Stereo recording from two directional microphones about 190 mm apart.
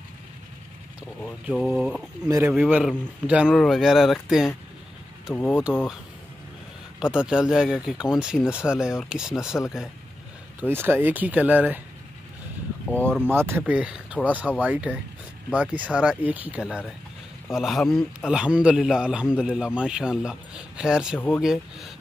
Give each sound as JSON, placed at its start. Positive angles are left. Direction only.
{"t": 1.4, "sound": "a man's voice", "side_deg": 0}
{"t": 2.2, "sound": "speech", "side_deg": -15}
{"t": 2.5, "sound": "a man's voice", "side_deg": -5}
{"t": 5.3, "sound": "speech", "side_deg": 10}
{"t": 7.0, "sound": "a man's voice", "side_deg": -5}
{"t": 10.6, "sound": "speech", "side_deg": -10}
{"t": 12.9, "sound": "speech", "side_deg": 5}
{"t": 13.3, "sound": "a man's voice", "side_deg": -10}